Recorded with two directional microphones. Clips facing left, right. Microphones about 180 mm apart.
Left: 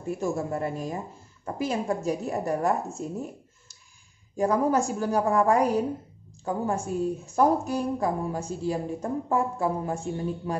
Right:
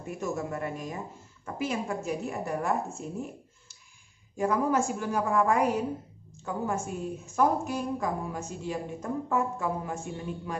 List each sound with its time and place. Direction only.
0.2 s a woman's voice: 30° left (ahead or behind)
4.4 s a woman's voice: 35° left (ahead or behind)